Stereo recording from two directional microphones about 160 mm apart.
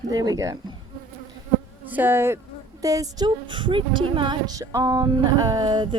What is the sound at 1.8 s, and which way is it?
Speech, 10° right (ahead or behind).